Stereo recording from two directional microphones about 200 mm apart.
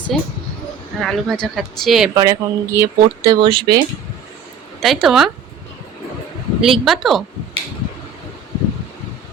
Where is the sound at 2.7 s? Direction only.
15° right (ahead or behind).